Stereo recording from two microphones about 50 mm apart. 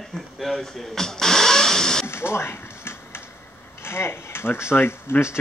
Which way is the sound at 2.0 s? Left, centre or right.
Left.